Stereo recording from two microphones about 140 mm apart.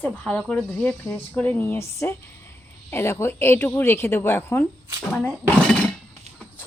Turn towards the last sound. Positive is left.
turn(degrees=5)  # may be behind; listen again after turning